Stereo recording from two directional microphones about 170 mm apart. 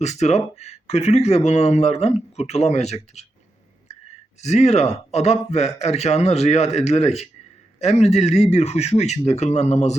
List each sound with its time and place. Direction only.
0.0 s speech: 40° left (ahead or behind)
3.9 s a sound: 40° left (ahead or behind)
4.4 s speech: 40° left (ahead or behind)